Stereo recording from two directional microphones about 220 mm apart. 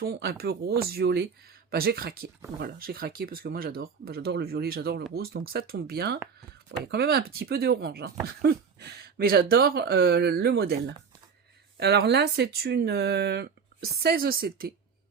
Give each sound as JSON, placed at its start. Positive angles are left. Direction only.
{"t": 0.0, "sound": "speech", "side_deg": -45}